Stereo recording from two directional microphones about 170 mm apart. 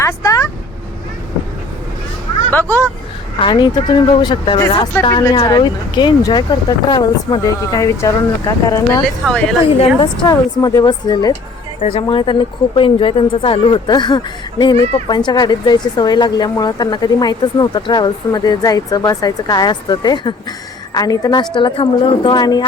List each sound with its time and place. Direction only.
0.0 s speech: 20° left (ahead or behind)
2.5 s speech: 10° left (ahead or behind)
3.4 s a woman's voice: 25° left (ahead or behind)
9.2 s a woman's voice: centre (ahead or behind)
10.2 s a woman's voice: 25° left (ahead or behind)
11.8 s a woman's voice: 35° left (ahead or behind)